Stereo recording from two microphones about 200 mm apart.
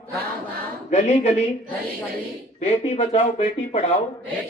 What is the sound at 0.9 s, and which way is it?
Speech, 35° left (ahead or behind).